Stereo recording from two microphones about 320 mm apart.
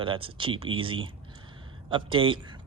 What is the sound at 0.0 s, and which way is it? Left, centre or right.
Speech, centre.